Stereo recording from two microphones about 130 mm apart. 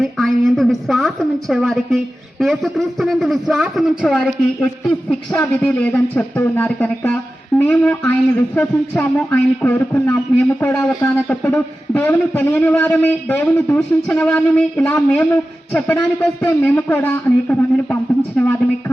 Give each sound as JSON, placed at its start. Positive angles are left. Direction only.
{"t": 0.0, "sound": "a woman's voice", "side_deg": 0}